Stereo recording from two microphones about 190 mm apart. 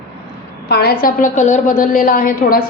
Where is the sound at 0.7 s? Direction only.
55° left (ahead or behind).